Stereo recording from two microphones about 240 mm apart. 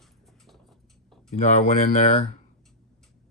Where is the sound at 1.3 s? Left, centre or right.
Left.